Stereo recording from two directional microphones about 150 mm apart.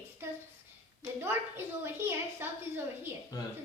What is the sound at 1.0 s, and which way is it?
A woman's voice, 15° right (ahead or behind).